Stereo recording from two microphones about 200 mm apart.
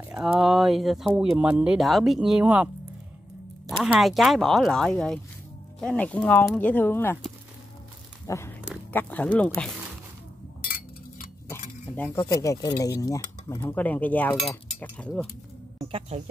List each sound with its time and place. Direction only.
0.1 s speech: 5° right (ahead or behind)
3.8 s speech: centre (ahead or behind)
8.3 s a sound: 10° left (ahead or behind)
8.9 s speech: 5° left (ahead or behind)
11.9 s speech: 10° left (ahead or behind)
15.8 s speech: 25° right (ahead or behind)